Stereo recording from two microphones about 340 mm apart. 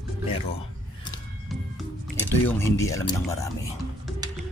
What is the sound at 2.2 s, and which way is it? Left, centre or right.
Speech, centre.